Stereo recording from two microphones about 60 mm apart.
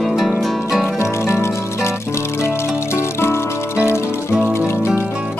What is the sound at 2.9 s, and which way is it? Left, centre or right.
Music, left.